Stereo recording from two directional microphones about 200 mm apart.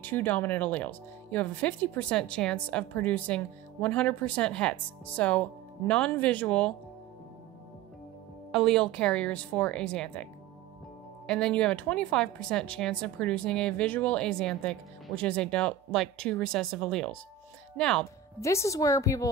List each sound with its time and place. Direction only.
0.0 s speech: 10° left (ahead or behind)
8.5 s speech: centre (ahead or behind)
11.2 s speech: 5° left (ahead or behind)
18.4 s speech: 15° left (ahead or behind)